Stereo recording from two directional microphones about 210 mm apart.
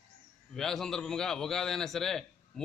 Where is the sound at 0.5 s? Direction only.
Centre (ahead or behind).